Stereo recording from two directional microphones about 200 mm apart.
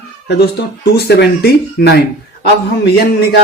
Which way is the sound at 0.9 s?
55° left (ahead or behind).